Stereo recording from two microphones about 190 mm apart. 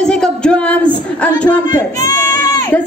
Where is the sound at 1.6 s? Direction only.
20° left (ahead or behind).